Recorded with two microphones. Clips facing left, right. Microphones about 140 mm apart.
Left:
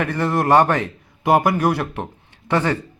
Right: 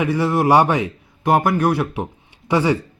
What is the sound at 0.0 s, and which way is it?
Speech, 5° right (ahead or behind).